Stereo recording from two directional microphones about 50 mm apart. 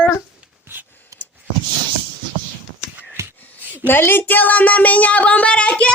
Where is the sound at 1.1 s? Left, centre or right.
Right.